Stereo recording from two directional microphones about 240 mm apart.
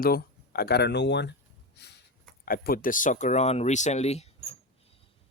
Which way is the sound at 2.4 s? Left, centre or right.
Left.